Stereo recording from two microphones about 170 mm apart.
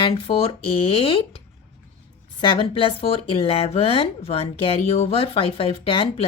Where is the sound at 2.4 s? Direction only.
30° left (ahead or behind).